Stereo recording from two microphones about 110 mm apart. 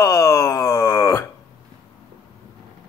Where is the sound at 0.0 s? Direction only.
25° left (ahead or behind).